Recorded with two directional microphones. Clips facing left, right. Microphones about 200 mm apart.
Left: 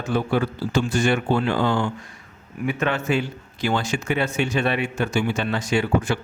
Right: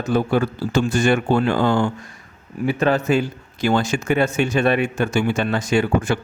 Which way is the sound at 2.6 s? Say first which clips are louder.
Right 5 dB; 35° right (ahead or behind).